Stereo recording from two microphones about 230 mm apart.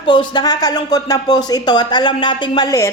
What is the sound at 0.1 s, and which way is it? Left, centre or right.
Speech, centre.